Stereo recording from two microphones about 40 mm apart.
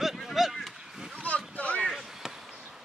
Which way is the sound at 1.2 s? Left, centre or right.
Left.